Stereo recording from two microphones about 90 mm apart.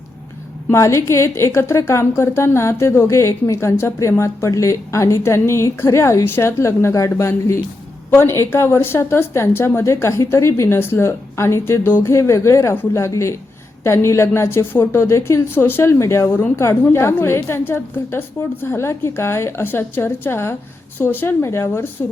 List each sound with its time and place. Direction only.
0.7 s a woman's voice: 35° left (ahead or behind)